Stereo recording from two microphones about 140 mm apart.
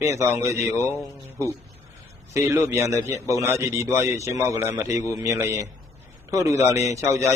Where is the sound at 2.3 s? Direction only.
20° right (ahead or behind).